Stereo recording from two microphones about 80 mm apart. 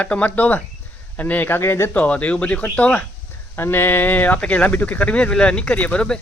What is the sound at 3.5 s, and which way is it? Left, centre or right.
Speech, left.